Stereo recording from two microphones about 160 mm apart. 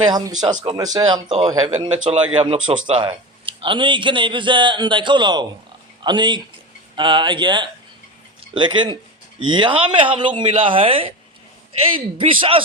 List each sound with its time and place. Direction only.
0.0 s speech: 25° right (ahead or behind)